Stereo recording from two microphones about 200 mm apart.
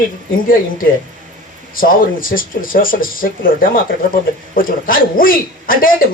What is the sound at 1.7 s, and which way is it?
Speech, 45° left (ahead or behind).